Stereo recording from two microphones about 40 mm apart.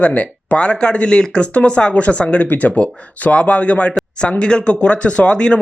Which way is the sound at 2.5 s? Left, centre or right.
Left.